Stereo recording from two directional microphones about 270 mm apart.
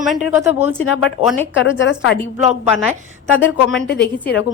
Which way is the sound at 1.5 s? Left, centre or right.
Left.